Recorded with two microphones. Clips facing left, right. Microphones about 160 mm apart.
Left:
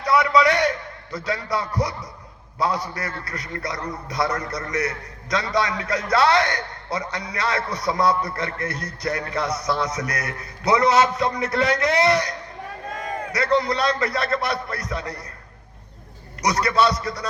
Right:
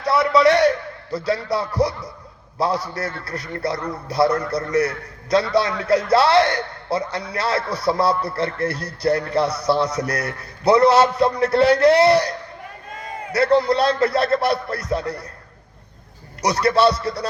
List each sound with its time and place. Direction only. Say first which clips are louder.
0.0 s a sound: right 2 dB; 30° right (ahead or behind)
1.1 s a man's voice: right 4 dB; 30° right (ahead or behind)
16.4 s a man's voice: right 3 dB; 30° right (ahead or behind)